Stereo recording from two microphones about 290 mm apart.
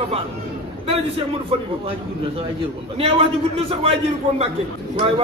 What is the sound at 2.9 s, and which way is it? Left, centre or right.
A man's voice, centre.